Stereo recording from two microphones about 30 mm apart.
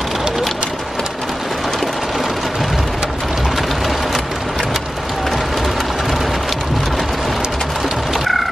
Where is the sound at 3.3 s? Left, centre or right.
Centre.